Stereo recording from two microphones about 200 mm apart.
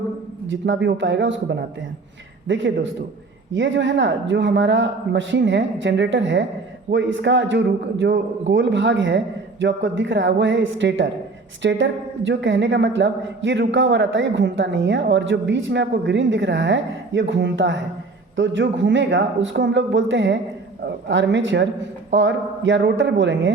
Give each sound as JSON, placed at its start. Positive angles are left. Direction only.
{"t": 0.5, "sound": "a woman's voice", "side_deg": -65}